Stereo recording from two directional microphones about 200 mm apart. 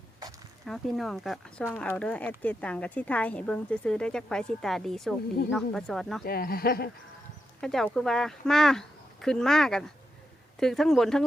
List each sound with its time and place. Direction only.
0.6 s speech: centre (ahead or behind)
6.2 s speech: 50° left (ahead or behind)
7.6 s speech: centre (ahead or behind)